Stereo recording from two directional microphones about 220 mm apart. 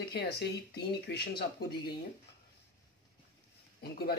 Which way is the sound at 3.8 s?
45° left (ahead or behind).